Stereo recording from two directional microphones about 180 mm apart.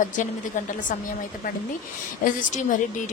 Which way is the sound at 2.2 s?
45° left (ahead or behind).